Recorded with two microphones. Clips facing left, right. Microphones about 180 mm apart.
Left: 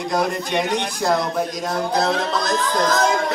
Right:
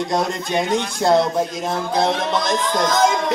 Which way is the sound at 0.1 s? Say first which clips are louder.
Left 3 dB; 25° right (ahead or behind).